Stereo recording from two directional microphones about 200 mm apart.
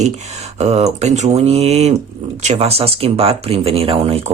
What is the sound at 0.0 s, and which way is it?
Speech, 35° right (ahead or behind).